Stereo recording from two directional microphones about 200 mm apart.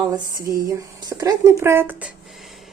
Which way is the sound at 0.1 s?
20° right (ahead or behind).